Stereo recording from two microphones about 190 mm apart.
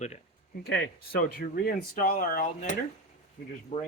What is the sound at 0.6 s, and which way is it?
Speech, 60° left (ahead or behind).